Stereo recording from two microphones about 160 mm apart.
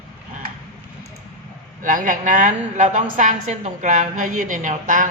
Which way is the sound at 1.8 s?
55° right (ahead or behind).